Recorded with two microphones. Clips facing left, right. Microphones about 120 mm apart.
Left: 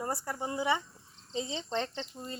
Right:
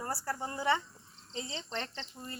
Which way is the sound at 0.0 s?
20° left (ahead or behind).